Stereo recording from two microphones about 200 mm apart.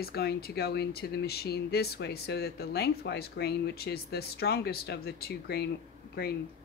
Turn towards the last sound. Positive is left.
turn(degrees=50)  # may be behind; listen again after turning